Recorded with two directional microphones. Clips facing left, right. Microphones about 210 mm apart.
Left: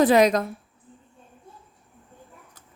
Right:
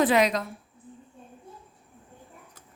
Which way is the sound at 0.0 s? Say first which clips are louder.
Left 5 dB; 40° left (ahead or behind).